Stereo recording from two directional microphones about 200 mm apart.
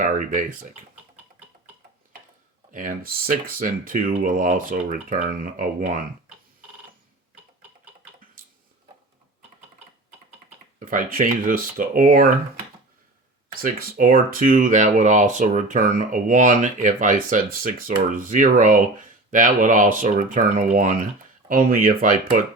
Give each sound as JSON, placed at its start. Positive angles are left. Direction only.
{"t": 0.0, "sound": "speech", "side_deg": -40}
{"t": 2.7, "sound": "speech", "side_deg": -45}
{"t": 10.8, "sound": "speech", "side_deg": -45}
{"t": 13.6, "sound": "speech", "side_deg": -45}